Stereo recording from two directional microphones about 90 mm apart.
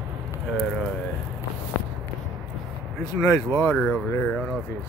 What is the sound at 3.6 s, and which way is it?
Speech, 15° left (ahead or behind).